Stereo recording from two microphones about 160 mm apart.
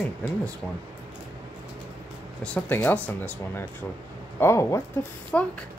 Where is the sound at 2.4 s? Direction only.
10° left (ahead or behind).